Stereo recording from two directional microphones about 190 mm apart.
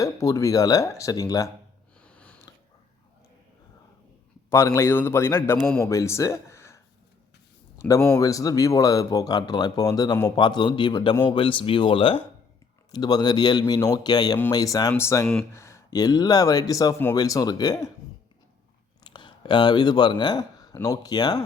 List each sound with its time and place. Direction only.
0.0 s a man's voice: 15° left (ahead or behind)
2.0 s a sound: 5° left (ahead or behind)
4.4 s a man's voice: 15° left (ahead or behind)
19.0 s speech: 25° left (ahead or behind)